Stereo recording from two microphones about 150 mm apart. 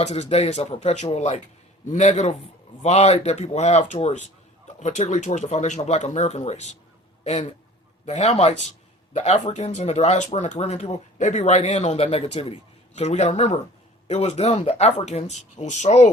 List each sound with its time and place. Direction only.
0.0 s speech: 45° left (ahead or behind)